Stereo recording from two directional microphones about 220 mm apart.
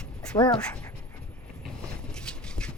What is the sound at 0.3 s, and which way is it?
Speech, 20° left (ahead or behind).